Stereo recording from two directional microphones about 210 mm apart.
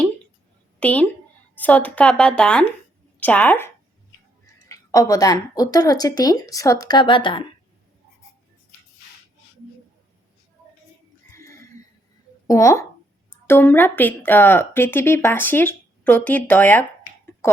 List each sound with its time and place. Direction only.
0.8 s a woman's voice: 5° left (ahead or behind); by 7.4 s 25° left (ahead or behind)
12.5 s speech: 15° left (ahead or behind)